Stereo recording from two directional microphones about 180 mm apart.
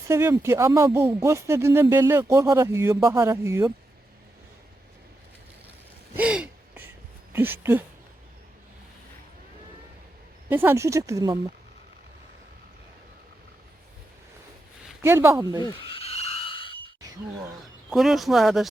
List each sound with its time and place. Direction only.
0.1 s speech: 15° right (ahead or behind)
6.1 s gasp: 5° right (ahead or behind)
7.3 s speech: 10° right (ahead or behind)
10.5 s speech: 10° right (ahead or behind)
15.0 s speech: 15° right (ahead or behind)
15.6 s frog: 30° left (ahead or behind)
17.8 s speech: centre (ahead or behind)